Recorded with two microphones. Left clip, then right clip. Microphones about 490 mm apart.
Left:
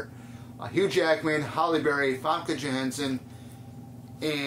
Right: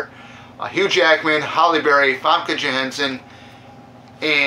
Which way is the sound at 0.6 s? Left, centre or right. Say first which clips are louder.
Right 9 dB; left.